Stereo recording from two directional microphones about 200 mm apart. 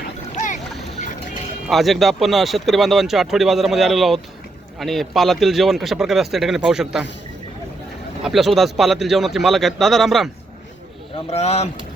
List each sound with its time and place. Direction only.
0.3 s boat: 35° left (ahead or behind)
0.9 s music: 40° left (ahead or behind)
1.6 s speech: centre (ahead or behind)
8.2 s speech: centre (ahead or behind)
11.3 s speech: 30° left (ahead or behind)